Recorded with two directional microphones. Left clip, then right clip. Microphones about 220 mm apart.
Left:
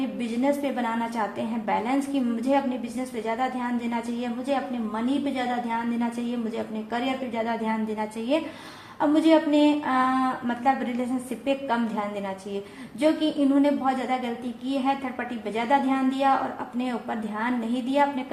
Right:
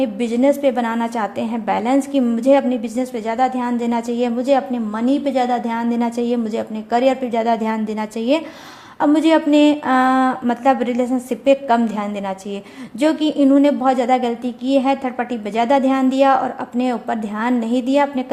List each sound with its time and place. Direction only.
0.2 s a woman's voice: 45° right (ahead or behind)